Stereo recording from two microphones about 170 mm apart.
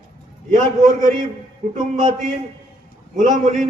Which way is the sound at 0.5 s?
50° right (ahead or behind).